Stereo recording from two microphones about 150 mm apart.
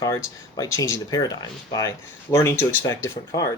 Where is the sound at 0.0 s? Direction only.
25° left (ahead or behind).